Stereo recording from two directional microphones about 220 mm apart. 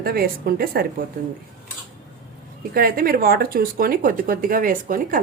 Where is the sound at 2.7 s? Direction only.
40° right (ahead or behind).